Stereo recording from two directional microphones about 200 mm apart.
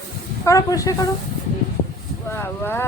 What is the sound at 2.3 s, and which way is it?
Speech, 10° left (ahead or behind).